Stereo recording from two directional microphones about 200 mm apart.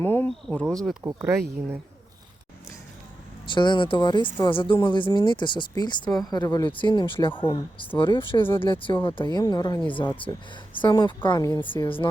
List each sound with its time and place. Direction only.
0.0 s speech: 10° left (ahead or behind)
3.5 s speech: 25° left (ahead or behind)